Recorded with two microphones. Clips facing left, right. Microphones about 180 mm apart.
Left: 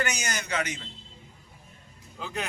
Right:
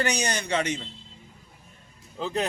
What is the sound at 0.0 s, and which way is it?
Speech, 35° right (ahead or behind).